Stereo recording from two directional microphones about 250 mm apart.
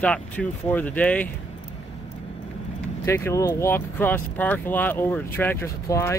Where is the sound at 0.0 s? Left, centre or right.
Centre.